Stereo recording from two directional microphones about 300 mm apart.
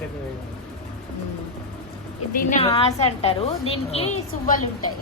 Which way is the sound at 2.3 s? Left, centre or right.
Left.